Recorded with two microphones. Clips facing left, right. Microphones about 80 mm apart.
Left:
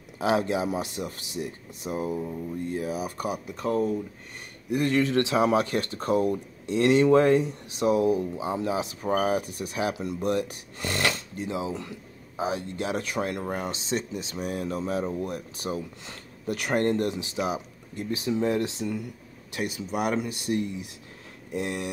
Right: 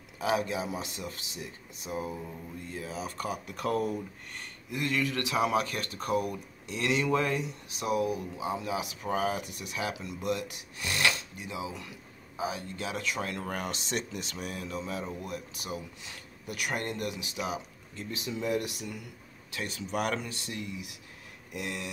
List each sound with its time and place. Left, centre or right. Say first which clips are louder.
0.2 s speech: left 5 dB; left
3.5 s speech: left 4 dB; centre
4.7 s speech: left 8 dB; left
19.7 s speech: left 2 dB; centre
20.2 s speech: left 10 dB; left
21.5 s a sound: left 7 dB; left